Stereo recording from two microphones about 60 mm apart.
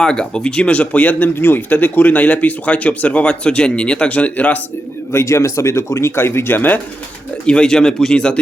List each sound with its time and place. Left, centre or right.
0.0 s speech: centre
1.4 s speech: left
5.2 s speech: left
7.4 s speech: centre